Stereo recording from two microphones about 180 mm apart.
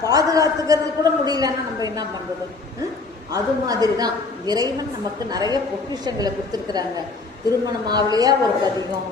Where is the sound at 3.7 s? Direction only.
20° right (ahead or behind).